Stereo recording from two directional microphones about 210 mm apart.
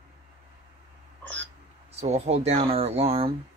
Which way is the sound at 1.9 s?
30° right (ahead or behind).